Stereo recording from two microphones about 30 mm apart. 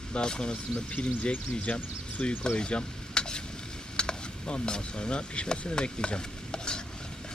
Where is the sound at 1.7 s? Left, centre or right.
Left.